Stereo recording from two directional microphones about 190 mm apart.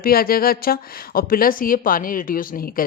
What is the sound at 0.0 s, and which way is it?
A woman's voice, 50° left (ahead or behind).